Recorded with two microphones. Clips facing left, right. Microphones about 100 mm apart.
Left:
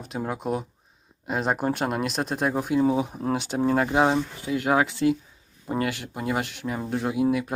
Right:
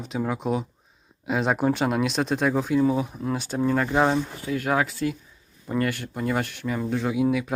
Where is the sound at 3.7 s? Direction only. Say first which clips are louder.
Even; 15° left (ahead or behind).